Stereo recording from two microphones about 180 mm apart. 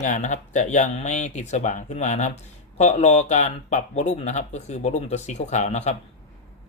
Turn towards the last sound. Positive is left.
turn(degrees=40)  # may be behind; listen again after turning